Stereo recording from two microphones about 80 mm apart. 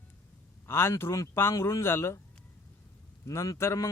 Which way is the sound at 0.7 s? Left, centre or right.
Left.